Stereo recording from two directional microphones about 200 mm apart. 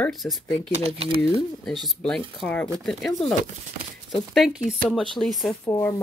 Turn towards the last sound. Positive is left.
turn(degrees=15)  # may be behind; listen again after turning